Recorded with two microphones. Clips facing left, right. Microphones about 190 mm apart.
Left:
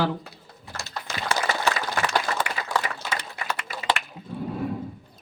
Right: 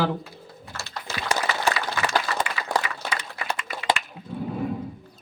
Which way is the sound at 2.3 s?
55° left (ahead or behind).